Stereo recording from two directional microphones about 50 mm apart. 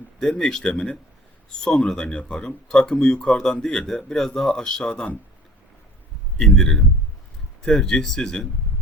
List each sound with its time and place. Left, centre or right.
0.2 s speech: centre
6.4 s speech: centre